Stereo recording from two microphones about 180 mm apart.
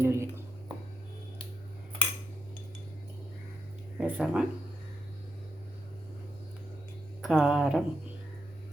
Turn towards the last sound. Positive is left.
turn(degrees=-5)  # may be behind; listen again after turning